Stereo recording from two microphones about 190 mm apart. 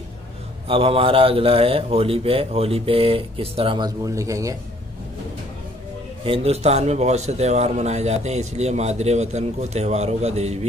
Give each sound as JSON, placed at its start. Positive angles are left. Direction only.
{"t": 0.7, "sound": "a man's voice", "side_deg": -30}
{"t": 6.2, "sound": "a man's voice", "side_deg": -30}